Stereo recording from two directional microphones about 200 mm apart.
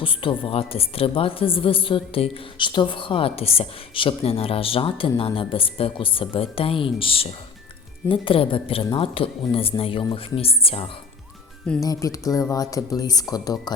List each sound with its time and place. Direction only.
0.0 s a woman's voice: 25° left (ahead or behind)
11.8 s a woman's voice: 15° left (ahead or behind)